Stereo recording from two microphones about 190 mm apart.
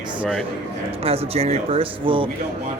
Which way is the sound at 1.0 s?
30° right (ahead or behind).